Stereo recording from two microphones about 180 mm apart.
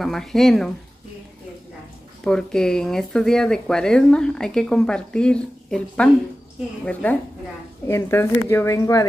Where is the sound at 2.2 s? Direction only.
5° left (ahead or behind).